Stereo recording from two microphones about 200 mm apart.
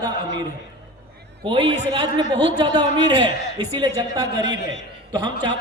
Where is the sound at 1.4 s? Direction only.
25° right (ahead or behind).